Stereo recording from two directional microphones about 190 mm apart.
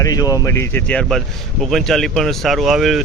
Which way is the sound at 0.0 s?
20° left (ahead or behind).